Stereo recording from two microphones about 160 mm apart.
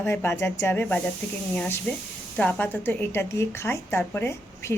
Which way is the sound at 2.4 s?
5° left (ahead or behind).